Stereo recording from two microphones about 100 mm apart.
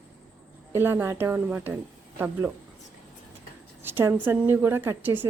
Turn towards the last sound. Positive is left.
turn(degrees=-20)  # may be behind; listen again after turning